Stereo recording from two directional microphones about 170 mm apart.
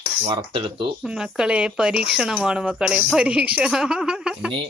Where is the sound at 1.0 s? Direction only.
5° right (ahead or behind).